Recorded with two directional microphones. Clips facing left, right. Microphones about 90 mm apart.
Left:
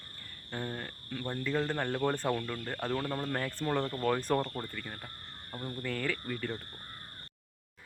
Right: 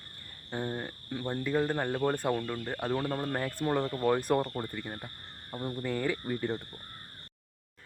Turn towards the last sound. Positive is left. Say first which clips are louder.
# right 4 dB
turn(degrees=-20)  # may be behind; listen again after turning